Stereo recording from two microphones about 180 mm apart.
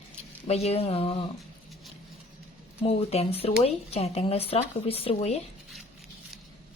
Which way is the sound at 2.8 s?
35° left (ahead or behind).